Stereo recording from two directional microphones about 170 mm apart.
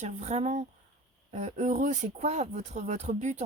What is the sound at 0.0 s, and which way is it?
Speech, 40° right (ahead or behind).